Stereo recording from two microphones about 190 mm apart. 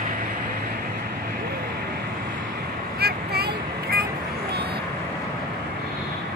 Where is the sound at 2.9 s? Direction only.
55° right (ahead or behind).